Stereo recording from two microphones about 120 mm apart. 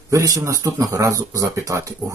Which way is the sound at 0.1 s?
25° right (ahead or behind).